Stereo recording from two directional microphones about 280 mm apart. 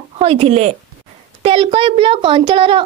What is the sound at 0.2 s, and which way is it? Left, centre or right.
A woman's voice, right.